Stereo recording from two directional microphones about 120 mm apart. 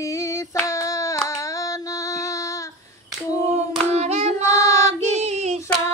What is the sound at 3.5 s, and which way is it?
Hands, 65° right (ahead or behind).